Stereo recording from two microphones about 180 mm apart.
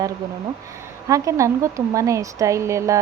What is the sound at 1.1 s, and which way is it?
Speech, 15° right (ahead or behind).